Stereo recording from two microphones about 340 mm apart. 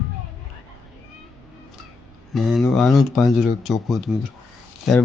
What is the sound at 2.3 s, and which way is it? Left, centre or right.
Speech, centre.